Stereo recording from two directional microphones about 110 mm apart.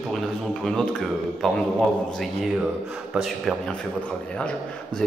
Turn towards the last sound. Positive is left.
turn(degrees=10)  # may be behind; listen again after turning